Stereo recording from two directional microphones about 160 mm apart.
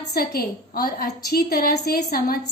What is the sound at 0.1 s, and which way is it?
A woman's voice, 75° left (ahead or behind).